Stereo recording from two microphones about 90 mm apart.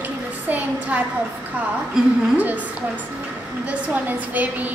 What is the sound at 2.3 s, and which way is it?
Speech, 15° right (ahead or behind).